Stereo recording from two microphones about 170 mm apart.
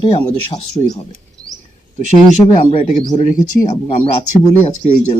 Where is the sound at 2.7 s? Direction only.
45° left (ahead or behind).